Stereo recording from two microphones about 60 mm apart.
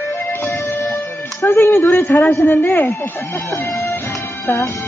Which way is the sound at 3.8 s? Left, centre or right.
Left.